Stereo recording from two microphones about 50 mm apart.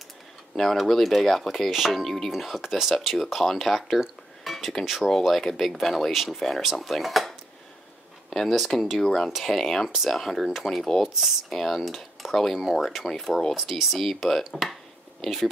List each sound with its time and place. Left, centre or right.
0.6 s speech: centre
2.0 s speech: centre
13.6 s speech: centre